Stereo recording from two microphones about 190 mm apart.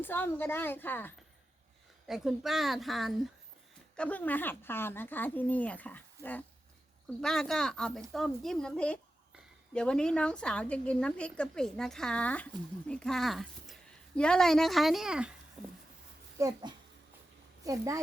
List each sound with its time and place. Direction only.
0.0 s speech: 10° left (ahead or behind)
2.0 s speech: centre (ahead or behind)
16.4 s speech: 15° right (ahead or behind)
17.6 s a woman's voice: 15° right (ahead or behind)